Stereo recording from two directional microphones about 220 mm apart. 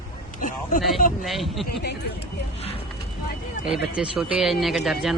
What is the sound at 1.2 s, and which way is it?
Speech, centre (ahead or behind).